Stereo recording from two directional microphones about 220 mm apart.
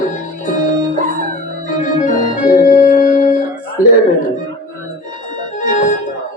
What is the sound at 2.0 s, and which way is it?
Organ, 35° left (ahead or behind).